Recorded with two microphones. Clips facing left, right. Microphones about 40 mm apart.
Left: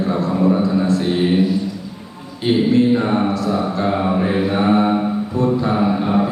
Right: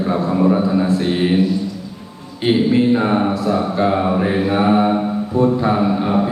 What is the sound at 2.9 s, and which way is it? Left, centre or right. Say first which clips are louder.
Mantra: right 1 dB; centre.